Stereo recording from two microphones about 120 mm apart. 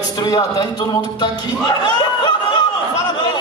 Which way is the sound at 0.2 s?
35° left (ahead or behind).